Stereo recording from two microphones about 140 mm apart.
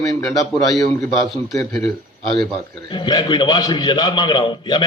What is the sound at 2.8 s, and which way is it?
A man's voice, 35° left (ahead or behind).